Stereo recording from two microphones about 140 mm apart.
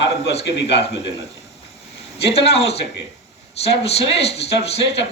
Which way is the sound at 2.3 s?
45° left (ahead or behind).